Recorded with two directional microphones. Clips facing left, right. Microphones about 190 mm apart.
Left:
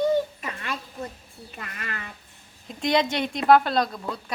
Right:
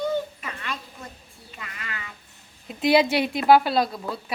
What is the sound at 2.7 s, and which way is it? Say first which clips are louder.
A woman's voice: right 4 dB; 5° right (ahead or behind).